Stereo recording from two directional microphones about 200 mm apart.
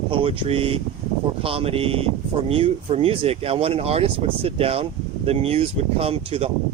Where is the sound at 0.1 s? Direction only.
25° right (ahead or behind).